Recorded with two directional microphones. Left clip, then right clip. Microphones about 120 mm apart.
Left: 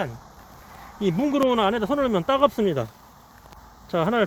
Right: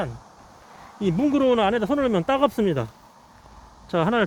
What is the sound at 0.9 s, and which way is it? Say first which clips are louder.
Speech: even; 70° right (ahead or behind).